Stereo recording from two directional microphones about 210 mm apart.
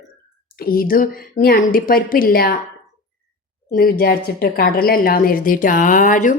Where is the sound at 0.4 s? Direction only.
45° left (ahead or behind).